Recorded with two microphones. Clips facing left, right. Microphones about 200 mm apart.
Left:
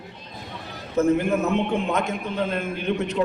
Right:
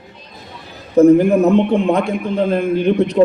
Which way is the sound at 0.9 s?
35° right (ahead or behind).